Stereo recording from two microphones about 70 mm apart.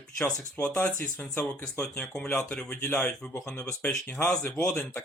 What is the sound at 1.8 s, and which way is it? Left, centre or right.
A man's voice, left.